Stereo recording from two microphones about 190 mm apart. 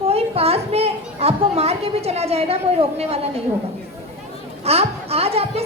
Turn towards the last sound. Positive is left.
turn(degrees=-30)  # may be behind; listen again after turning